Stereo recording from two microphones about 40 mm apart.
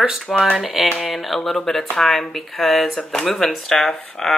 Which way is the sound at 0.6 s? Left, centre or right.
Centre.